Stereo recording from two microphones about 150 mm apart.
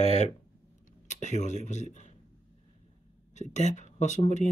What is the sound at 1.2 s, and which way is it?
Speech, 50° left (ahead or behind).